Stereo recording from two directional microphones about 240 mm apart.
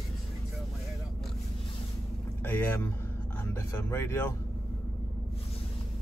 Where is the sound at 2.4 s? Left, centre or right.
Centre.